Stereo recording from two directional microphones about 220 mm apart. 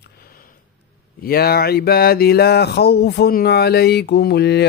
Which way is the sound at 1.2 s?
45° left (ahead or behind).